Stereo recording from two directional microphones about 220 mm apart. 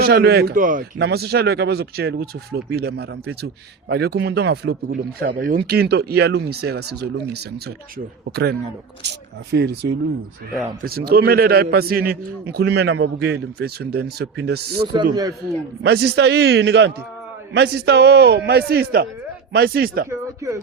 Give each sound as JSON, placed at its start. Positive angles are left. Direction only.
{"t": 0.0, "sound": "speech", "side_deg": -45}
{"t": 20.1, "sound": "speech", "side_deg": -15}